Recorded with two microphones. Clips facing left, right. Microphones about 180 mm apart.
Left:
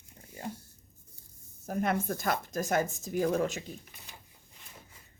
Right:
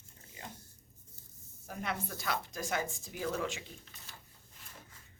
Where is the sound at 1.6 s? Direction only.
50° left (ahead or behind).